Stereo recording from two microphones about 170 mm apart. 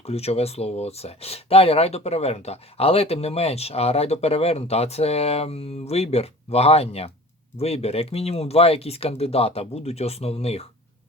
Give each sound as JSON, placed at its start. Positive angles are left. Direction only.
{"t": 0.0, "sound": "speech", "side_deg": 35}